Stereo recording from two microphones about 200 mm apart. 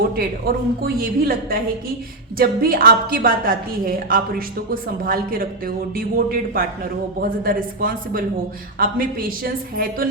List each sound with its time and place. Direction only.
0.2 s a woman's voice: 50° right (ahead or behind)